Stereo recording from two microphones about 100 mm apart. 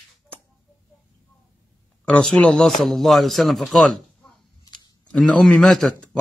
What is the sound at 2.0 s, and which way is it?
Speech, 5° left (ahead or behind).